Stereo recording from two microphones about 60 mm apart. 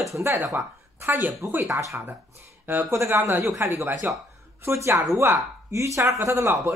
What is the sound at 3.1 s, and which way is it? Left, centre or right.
Speech, right.